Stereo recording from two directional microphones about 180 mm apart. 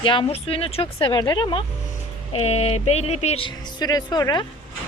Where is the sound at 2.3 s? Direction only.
35° left (ahead or behind).